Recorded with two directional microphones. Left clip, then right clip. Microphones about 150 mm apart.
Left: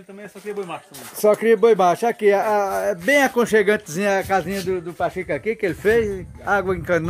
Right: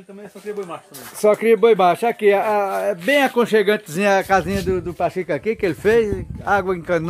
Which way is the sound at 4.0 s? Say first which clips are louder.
Right 3 dB; 10° right (ahead or behind).